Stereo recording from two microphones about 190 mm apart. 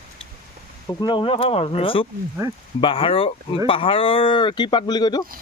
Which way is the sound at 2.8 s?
30° left (ahead or behind).